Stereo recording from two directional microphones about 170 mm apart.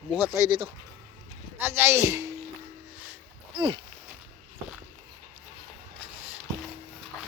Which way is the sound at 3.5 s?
30° right (ahead or behind).